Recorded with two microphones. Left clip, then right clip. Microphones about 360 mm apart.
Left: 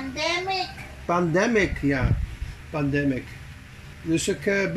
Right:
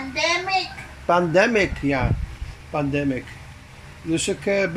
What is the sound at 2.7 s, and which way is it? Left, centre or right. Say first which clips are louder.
Speech: right 2 dB; centre.